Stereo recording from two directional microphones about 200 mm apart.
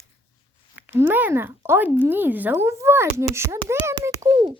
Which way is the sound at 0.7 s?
10° right (ahead or behind).